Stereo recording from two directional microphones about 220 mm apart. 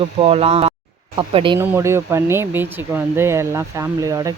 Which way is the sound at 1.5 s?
10° right (ahead or behind).